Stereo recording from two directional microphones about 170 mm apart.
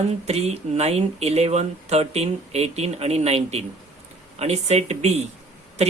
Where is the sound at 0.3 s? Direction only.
40° right (ahead or behind).